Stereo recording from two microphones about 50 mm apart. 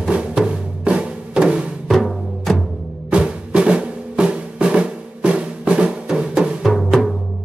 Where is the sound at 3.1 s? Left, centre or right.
Right.